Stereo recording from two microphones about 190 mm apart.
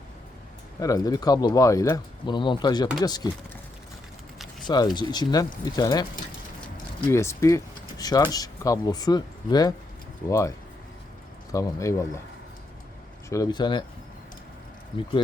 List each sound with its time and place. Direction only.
0.8 s speech: 20° left (ahead or behind)
4.9 s speech: 20° left (ahead or behind)
7.1 s speech: 15° left (ahead or behind)
11.5 s speech: 15° left (ahead or behind)
13.3 s speech: 20° left (ahead or behind)